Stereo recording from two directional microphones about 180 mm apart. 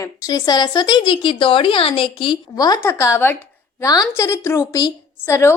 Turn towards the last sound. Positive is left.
turn(degrees=15)  # may be behind; listen again after turning